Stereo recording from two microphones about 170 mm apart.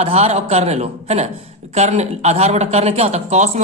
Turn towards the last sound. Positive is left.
turn(degrees=-45)  # may be behind; listen again after turning